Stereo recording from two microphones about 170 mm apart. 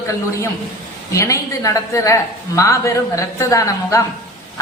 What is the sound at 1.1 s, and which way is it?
Speech, 20° left (ahead or behind).